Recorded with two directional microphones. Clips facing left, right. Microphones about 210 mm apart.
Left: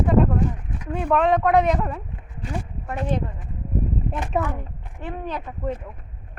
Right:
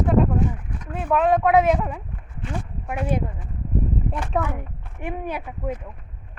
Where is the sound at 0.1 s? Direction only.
5° right (ahead or behind).